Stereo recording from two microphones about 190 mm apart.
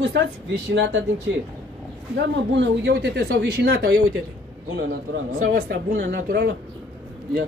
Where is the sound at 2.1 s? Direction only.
70° right (ahead or behind); by 3.9 s 55° right (ahead or behind).